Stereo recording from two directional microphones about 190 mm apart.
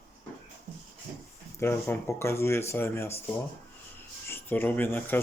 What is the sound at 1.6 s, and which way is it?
Speech, 15° left (ahead or behind).